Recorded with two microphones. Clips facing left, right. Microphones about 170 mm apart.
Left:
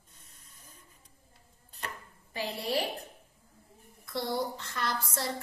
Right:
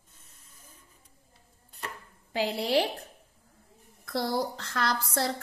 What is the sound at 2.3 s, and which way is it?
Speech, 90° right.